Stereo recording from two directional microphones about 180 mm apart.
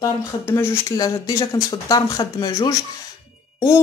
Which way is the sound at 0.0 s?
15° left (ahead or behind).